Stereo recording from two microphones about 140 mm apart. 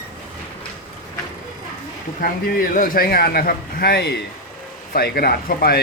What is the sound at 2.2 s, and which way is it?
A man's voice, 90° left.